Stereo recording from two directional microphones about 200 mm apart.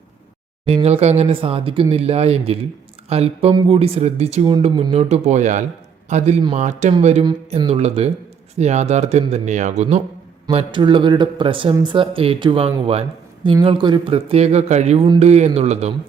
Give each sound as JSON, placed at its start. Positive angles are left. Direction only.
{"t": 0.6, "sound": "speech", "side_deg": -30}